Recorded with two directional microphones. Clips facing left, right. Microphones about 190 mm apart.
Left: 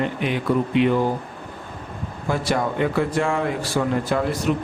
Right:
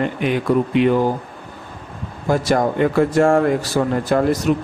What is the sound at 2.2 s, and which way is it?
Speech, 45° right (ahead or behind).